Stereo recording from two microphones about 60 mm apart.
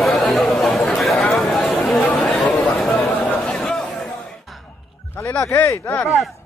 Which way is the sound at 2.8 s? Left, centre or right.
Centre.